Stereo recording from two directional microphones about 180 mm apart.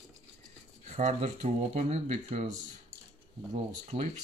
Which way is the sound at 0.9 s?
40° right (ahead or behind).